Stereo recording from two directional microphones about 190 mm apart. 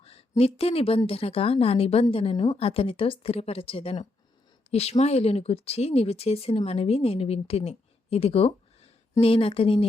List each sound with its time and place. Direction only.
0.0 s speech: 30° left (ahead or behind)